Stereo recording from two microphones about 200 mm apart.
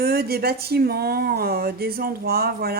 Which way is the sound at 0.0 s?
50° right (ahead or behind).